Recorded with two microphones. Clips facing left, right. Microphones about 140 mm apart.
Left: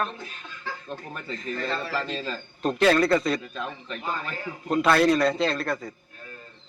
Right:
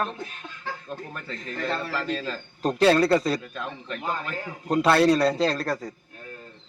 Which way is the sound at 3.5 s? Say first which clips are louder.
Even; centre (ahead or behind).